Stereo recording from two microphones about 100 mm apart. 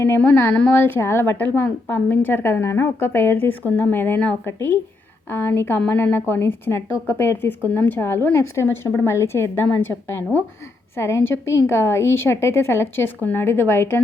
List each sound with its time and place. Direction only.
0.2 s a woman's voice: 20° left (ahead or behind)
0.8 s a woman's voice: 25° left (ahead or behind)